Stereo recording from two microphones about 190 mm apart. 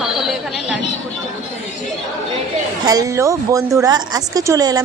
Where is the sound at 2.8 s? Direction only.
20° right (ahead or behind).